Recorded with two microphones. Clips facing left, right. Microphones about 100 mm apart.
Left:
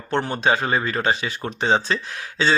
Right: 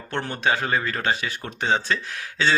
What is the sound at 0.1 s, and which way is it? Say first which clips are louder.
A man's voice: left 4 dB; 20° left (ahead or behind).